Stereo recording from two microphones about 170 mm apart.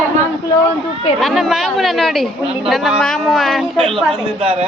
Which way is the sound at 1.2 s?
Centre (ahead or behind).